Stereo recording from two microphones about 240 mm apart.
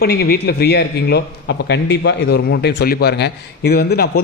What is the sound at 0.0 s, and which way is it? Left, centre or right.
A man's voice, left.